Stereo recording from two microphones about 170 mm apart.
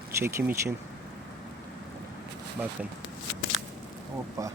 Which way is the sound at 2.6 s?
10° right (ahead or behind).